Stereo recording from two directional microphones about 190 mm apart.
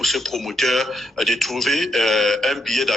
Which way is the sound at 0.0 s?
Centre (ahead or behind).